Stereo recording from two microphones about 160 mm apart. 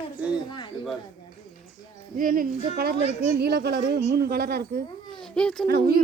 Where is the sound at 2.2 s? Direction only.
60° right (ahead or behind).